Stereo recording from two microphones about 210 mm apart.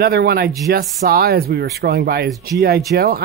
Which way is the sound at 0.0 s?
50° right (ahead or behind).